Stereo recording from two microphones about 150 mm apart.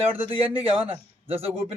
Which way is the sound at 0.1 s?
10° right (ahead or behind).